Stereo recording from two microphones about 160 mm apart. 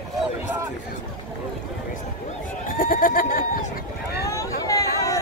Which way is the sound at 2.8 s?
60° left (ahead or behind).